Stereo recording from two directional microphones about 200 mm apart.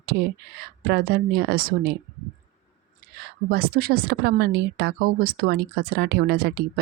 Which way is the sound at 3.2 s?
50° right (ahead or behind).